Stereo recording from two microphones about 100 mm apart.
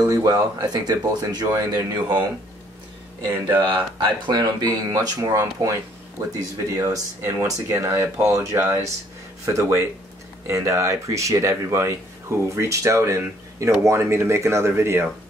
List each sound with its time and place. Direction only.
0.0 s speech: 40° right (ahead or behind)
3.3 s speech: 20° right (ahead or behind)
4.3 s speech: 40° right (ahead or behind); by 15.0 s 25° right (ahead or behind)